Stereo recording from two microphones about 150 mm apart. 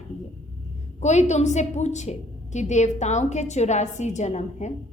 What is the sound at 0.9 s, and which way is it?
A woman's voice, 50° left (ahead or behind).